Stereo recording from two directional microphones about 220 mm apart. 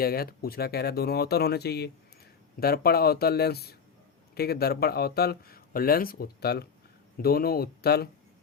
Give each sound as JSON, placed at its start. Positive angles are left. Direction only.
{"t": 0.0, "sound": "speech", "side_deg": 45}